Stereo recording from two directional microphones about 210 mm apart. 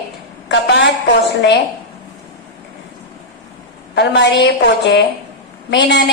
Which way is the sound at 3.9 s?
55° left (ahead or behind).